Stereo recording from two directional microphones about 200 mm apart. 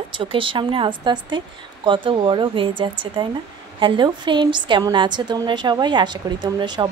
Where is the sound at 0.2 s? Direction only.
25° right (ahead or behind).